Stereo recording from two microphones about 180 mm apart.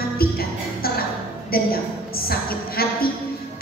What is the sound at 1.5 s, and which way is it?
Speech, 55° left (ahead or behind).